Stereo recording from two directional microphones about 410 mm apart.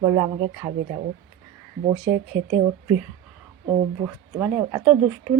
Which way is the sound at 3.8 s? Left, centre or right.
Centre.